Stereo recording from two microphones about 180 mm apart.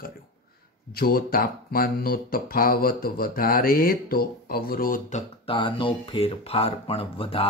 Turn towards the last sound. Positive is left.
turn(degrees=30)  # may be behind; listen again after turning